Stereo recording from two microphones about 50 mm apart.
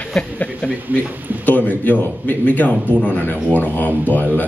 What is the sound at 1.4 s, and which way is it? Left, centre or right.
Speech, left.